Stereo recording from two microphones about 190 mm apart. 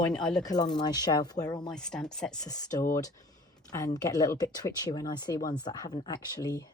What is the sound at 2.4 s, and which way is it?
Speech, 20° left (ahead or behind).